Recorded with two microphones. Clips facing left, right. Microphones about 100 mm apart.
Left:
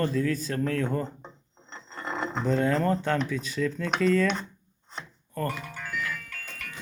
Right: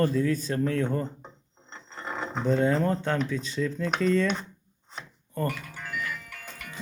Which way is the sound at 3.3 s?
5° left (ahead or behind).